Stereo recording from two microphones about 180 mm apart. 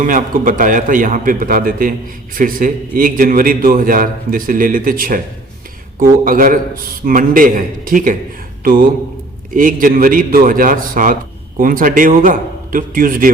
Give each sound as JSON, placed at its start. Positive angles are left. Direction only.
{"t": 0.0, "sound": "a man's voice", "side_deg": -50}